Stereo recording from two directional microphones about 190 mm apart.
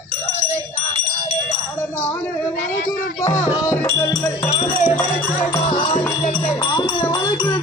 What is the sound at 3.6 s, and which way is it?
Music, 15° left (ahead or behind).